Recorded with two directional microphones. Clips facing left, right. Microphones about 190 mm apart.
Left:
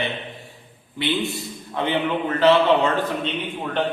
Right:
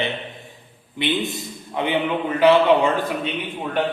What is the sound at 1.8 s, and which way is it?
A man's voice, 15° right (ahead or behind).